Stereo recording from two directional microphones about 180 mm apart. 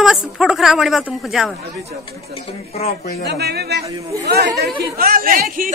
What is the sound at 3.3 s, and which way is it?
A man's voice, 65° right (ahead or behind).